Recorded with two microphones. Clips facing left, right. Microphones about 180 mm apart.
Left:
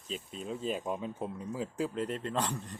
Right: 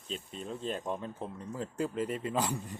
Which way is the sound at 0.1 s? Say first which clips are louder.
Left 1 dB; centre (ahead or behind).